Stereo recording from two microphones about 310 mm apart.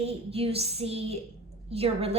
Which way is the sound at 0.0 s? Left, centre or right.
Centre.